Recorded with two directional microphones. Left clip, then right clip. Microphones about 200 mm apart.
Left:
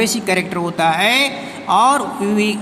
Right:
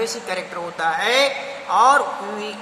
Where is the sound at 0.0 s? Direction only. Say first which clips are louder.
Left 7 dB; 50° left (ahead or behind).